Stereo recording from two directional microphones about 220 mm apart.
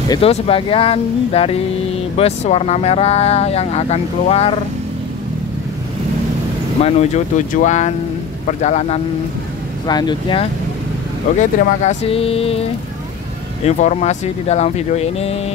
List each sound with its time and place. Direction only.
0.1 s speech: 25° left (ahead or behind)
6.8 s speech: 30° left (ahead or behind)
9.8 s speech: 20° left (ahead or behind)
11.3 s speech: 35° left (ahead or behind)
13.7 s speech: 30° left (ahead or behind)